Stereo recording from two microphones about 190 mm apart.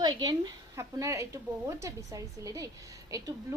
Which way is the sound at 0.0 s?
20° right (ahead or behind).